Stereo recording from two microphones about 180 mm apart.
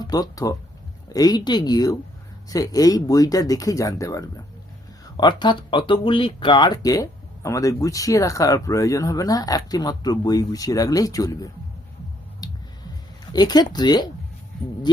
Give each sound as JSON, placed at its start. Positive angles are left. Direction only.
{"t": 0.0, "sound": "speech", "side_deg": 20}
{"t": 12.4, "sound": "music", "side_deg": 20}
{"t": 13.3, "sound": "speech", "side_deg": 20}